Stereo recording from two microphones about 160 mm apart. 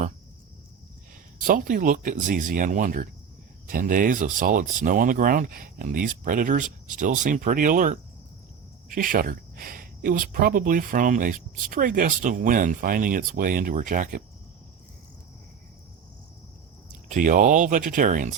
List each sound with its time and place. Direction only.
1.4 s speech: 60° right (ahead or behind)
17.1 s speech: 55° right (ahead or behind)